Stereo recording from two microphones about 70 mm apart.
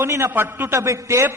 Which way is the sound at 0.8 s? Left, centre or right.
Right.